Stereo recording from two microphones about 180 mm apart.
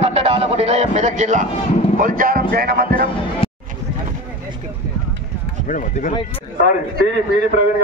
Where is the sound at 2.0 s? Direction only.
50° right (ahead or behind).